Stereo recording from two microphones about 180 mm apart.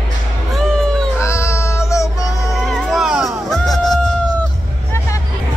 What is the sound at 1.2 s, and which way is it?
Child singing, 15° left (ahead or behind).